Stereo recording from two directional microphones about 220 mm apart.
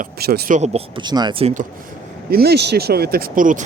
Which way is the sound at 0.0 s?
45° right (ahead or behind).